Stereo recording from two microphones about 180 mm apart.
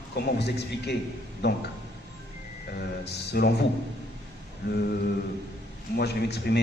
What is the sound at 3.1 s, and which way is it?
Speech, 65° left (ahead or behind).